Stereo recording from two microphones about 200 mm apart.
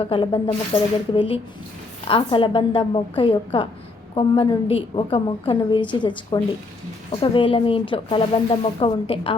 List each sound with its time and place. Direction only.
0.0 s speech: 25° left (ahead or behind)